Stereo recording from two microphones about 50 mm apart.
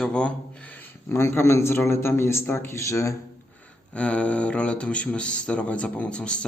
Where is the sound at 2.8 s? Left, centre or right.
Left.